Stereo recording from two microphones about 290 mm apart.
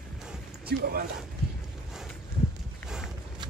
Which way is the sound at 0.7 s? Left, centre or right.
Right.